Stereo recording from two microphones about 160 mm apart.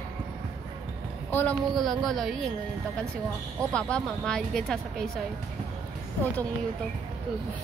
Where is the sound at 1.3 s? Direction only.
10° left (ahead or behind).